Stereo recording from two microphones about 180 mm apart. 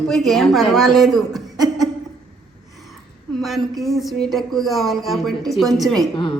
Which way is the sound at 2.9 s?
Centre (ahead or behind).